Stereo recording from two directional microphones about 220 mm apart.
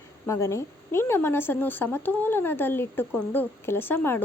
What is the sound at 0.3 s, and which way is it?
Speech, 10° left (ahead or behind).